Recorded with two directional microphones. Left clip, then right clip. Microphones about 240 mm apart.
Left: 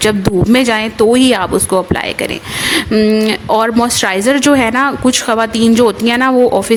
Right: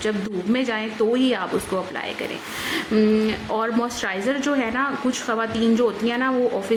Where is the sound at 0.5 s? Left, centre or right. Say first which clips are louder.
Left 10 dB; left.